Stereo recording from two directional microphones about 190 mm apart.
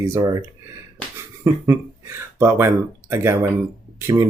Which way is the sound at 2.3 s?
10° right (ahead or behind).